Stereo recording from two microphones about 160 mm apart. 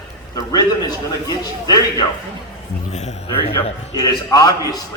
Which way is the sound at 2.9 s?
45° left (ahead or behind).